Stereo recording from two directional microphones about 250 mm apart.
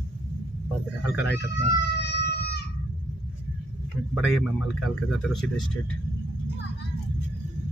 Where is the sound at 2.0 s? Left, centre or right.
Left.